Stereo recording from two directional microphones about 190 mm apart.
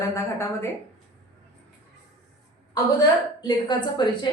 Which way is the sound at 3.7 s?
25° left (ahead or behind).